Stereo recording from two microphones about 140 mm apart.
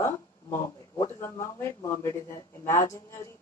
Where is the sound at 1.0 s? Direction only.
20° left (ahead or behind).